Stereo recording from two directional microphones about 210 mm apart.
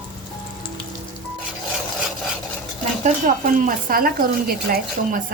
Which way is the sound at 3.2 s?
40° right (ahead or behind).